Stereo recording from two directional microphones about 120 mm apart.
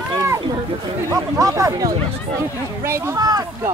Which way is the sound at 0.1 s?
30° right (ahead or behind).